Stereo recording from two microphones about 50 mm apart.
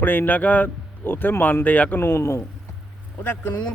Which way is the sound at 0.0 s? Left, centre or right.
Left.